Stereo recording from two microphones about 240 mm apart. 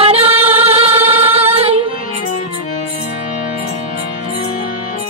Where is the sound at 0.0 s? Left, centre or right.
Right.